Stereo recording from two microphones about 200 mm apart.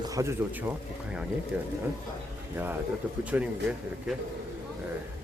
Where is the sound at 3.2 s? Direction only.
5° right (ahead or behind).